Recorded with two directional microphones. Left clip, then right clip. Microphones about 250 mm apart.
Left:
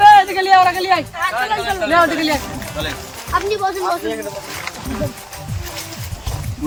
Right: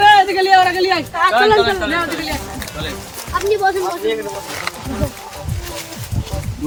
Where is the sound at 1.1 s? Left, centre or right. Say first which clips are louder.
Right 7 dB; centre.